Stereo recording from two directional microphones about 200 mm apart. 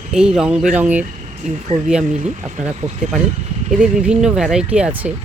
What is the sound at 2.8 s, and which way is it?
Speech, 10° right (ahead or behind).